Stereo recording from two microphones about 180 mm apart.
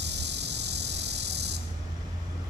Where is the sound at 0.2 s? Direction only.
70° right (ahead or behind).